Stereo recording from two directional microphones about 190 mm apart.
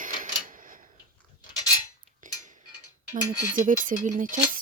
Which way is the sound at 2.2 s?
40° right (ahead or behind).